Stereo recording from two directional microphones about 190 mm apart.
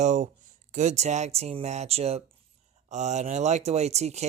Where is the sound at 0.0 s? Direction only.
35° right (ahead or behind).